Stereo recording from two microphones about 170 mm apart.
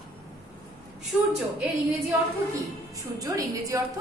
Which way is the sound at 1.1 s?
5° right (ahead or behind).